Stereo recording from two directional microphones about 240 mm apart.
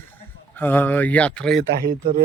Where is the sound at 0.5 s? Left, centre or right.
Centre.